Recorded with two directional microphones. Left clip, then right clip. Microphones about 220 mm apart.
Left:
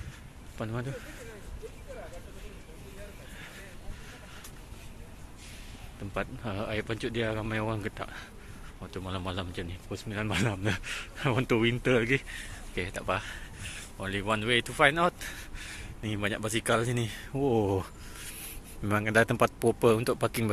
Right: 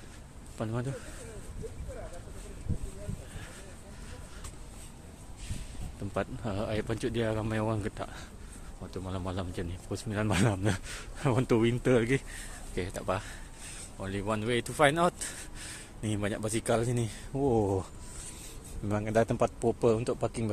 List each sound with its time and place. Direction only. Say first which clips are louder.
0.6 s speech: right 1 dB; 15° right (ahead or behind)
6.1 s speech: right 1 dB; 15° right (ahead or behind)
18.9 s speech: left 3 dB; centre (ahead or behind)